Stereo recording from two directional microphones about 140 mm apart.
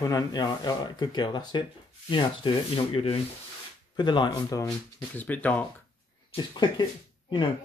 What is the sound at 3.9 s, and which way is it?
Speech, 30° left (ahead or behind).